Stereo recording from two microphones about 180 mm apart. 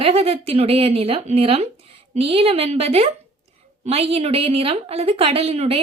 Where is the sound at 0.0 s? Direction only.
35° right (ahead or behind).